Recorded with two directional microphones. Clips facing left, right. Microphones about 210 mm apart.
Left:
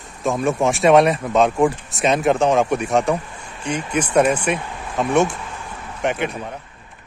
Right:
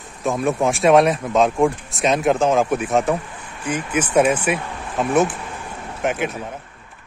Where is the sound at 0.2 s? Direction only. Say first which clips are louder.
Even; centre (ahead or behind).